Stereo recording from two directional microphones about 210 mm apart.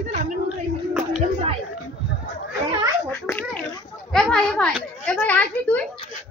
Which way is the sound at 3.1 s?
10° left (ahead or behind).